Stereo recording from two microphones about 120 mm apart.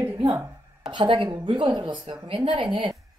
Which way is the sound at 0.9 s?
45° right (ahead or behind).